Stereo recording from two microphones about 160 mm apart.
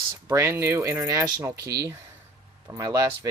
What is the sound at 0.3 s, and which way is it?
Speech, 15° right (ahead or behind).